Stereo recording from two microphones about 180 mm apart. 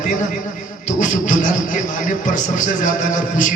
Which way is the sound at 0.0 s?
45° left (ahead or behind).